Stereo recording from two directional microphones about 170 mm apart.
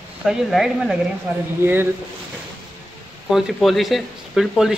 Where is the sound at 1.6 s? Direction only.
15° right (ahead or behind).